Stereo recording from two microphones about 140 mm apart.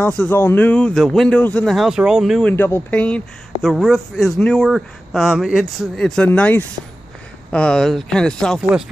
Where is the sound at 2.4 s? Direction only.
15° left (ahead or behind).